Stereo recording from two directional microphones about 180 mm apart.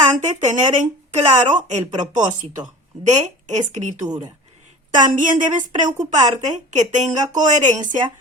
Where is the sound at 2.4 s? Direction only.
40° right (ahead or behind).